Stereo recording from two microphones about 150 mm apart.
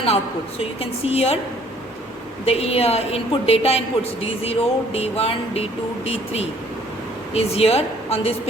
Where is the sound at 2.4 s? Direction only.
45° left (ahead or behind).